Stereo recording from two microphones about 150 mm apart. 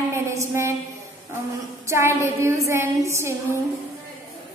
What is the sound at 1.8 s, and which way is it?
A woman's voice, 20° right (ahead or behind).